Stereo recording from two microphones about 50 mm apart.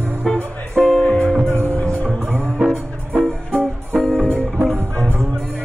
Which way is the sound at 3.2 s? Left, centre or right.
Centre.